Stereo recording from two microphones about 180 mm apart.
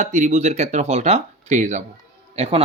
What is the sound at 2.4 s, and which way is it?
Speech, 30° right (ahead or behind).